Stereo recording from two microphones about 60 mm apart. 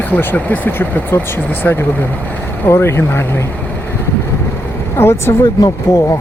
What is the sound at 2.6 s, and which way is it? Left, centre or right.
Speech, left.